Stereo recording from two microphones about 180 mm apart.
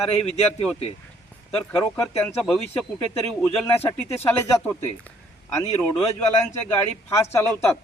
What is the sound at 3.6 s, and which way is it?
Speech, 15° left (ahead or behind).